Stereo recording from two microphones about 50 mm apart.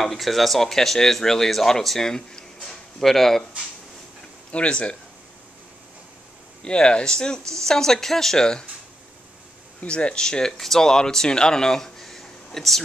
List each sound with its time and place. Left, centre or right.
0.0 s speech: centre
4.5 s speech: left
6.6 s speech: centre
9.8 s speech: left; by 12.8 s centre